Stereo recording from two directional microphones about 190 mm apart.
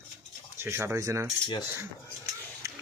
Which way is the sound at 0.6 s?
15° right (ahead or behind).